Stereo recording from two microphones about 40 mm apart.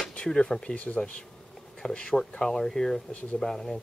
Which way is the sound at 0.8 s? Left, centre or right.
Left.